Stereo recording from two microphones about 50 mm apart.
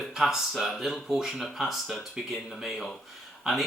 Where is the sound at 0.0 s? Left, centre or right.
Centre.